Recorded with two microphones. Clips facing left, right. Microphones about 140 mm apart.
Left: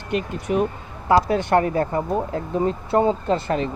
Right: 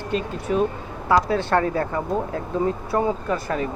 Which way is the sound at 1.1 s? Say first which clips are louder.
Left 2 dB; 20° left (ahead or behind).